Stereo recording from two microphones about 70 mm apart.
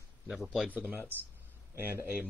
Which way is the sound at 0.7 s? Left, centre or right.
Right.